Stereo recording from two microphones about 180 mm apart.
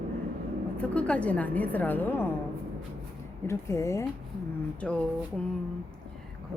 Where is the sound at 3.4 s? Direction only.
15° left (ahead or behind).